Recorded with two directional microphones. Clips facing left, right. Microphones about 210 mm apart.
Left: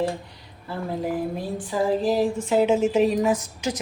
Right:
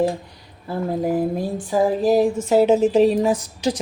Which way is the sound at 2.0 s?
40° right (ahead or behind).